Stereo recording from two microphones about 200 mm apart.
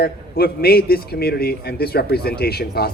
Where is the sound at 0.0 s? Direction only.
50° left (ahead or behind).